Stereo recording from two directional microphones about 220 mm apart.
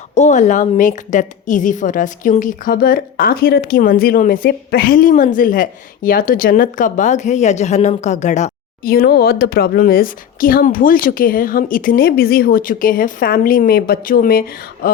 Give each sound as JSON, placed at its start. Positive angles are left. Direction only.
{"t": 0.1, "sound": "a woman's voice", "side_deg": 30}
{"t": 8.9, "sound": "a woman's voice", "side_deg": 45}